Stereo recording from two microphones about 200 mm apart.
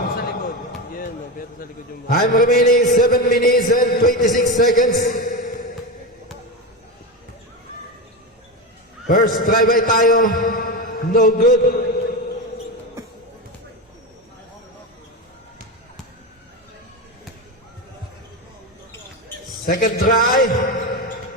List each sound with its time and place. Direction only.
0.2 s basketball bounce: 45° left (ahead or behind)
2.0 s a man's voice: 45° left (ahead or behind)
4.9 s a sound: 45° left (ahead or behind)
9.0 s a man's voice: 45° left (ahead or behind)
19.6 s a man's voice: 45° left (ahead or behind)